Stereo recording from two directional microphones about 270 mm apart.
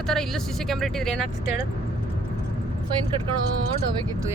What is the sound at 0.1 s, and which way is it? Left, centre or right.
Speech, centre.